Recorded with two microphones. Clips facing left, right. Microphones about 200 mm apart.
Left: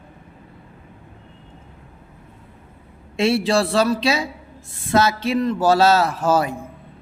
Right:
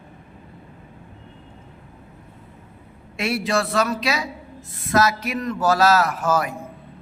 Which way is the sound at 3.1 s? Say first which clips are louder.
Left 5 dB; 25° left (ahead or behind).